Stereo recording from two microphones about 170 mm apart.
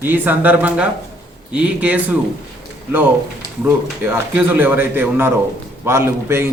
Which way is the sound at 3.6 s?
15° right (ahead or behind).